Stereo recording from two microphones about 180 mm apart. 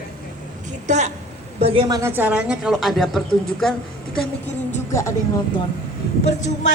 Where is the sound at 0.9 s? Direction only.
40° right (ahead or behind).